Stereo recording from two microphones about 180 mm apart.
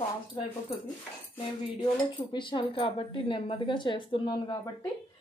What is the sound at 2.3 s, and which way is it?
Speech, 25° left (ahead or behind).